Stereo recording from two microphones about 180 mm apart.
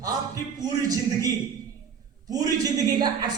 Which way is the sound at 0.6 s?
20° right (ahead or behind).